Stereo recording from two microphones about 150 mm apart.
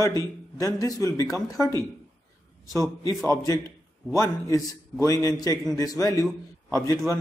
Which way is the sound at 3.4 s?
25° left (ahead or behind).